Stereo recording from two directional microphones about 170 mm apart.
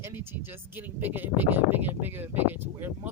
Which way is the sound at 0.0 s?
15° right (ahead or behind).